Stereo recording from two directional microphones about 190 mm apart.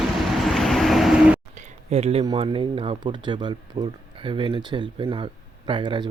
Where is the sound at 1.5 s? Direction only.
35° right (ahead or behind).